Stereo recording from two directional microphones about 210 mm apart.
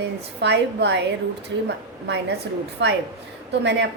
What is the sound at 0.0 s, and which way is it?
A woman's voice, 55° right (ahead or behind).